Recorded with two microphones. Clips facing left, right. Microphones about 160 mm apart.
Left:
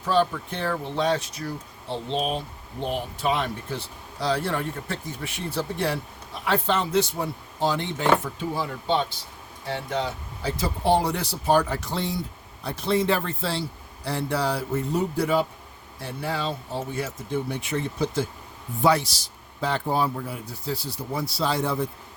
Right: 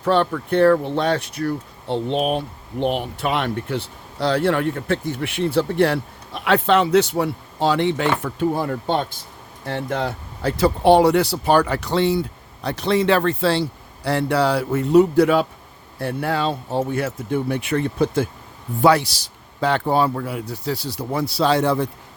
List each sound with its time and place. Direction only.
0.0 s speech: 65° right (ahead or behind)
16.0 s speech: 60° right (ahead or behind)
18.8 s speech: 70° right (ahead or behind)